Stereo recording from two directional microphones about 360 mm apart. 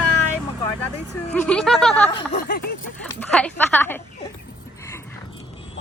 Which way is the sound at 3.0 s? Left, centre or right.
Centre.